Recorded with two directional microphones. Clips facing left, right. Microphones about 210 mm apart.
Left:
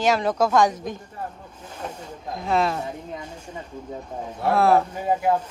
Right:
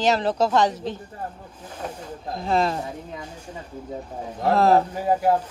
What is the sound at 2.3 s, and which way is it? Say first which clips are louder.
Speech: even; 35° right (ahead or behind).